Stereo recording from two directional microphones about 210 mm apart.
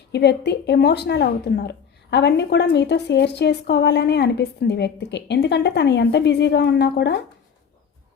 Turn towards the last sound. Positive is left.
turn(degrees=50)  # may be behind; listen again after turning